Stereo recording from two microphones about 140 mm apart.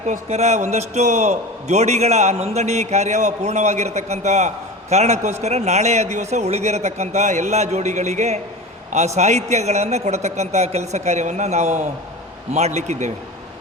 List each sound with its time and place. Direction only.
0.0 s a man's voice: 55° right (ahead or behind)